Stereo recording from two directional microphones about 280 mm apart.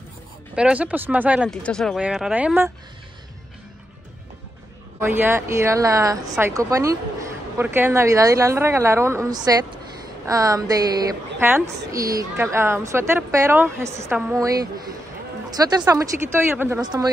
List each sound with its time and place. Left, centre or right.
0.6 s speech: centre
5.0 s a woman's voice: centre